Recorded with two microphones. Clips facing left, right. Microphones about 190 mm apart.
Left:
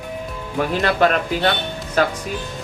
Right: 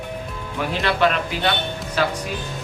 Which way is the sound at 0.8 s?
45° left (ahead or behind).